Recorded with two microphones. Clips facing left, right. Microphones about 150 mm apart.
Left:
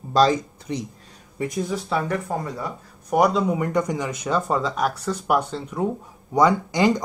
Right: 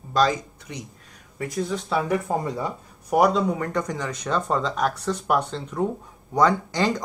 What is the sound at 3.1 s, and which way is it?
Speech, centre (ahead or behind).